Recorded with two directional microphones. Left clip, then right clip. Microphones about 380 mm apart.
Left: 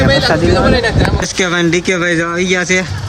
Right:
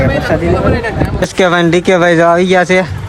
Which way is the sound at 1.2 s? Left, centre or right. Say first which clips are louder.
Right 8 dB; centre.